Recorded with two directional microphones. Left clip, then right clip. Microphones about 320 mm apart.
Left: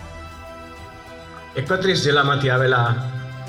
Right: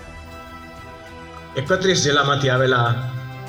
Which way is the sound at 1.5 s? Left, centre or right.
Right.